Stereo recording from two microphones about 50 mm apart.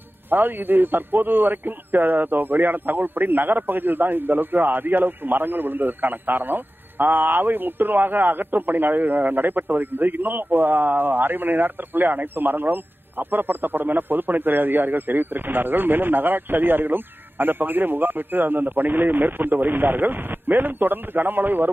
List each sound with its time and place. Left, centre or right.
0.3 s a man's voice: right